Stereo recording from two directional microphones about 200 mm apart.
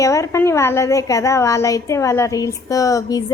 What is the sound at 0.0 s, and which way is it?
A woman's voice, 15° left (ahead or behind).